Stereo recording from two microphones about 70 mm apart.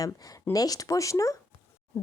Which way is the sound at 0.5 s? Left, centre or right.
Left.